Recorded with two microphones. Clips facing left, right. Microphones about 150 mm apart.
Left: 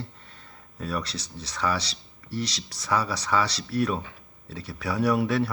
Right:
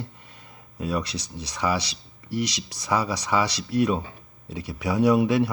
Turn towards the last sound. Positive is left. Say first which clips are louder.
# right 4 dB
turn(degrees=-20)  # may be behind; listen again after turning